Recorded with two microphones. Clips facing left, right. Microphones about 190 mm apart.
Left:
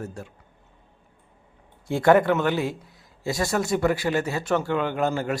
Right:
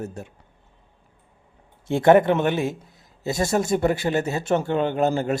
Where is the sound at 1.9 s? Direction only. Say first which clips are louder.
Right 2 dB; 20° right (ahead or behind).